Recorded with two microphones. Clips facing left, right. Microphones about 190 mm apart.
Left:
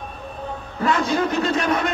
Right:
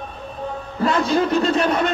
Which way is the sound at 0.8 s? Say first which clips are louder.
Right 2 dB; 30° right (ahead or behind).